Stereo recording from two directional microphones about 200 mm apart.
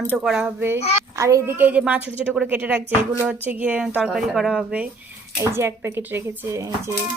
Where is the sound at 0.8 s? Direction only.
30° left (ahead or behind).